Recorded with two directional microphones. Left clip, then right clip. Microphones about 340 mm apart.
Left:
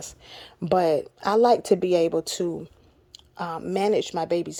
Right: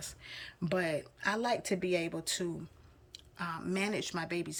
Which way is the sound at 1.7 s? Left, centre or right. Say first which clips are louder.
Left 13 dB; left.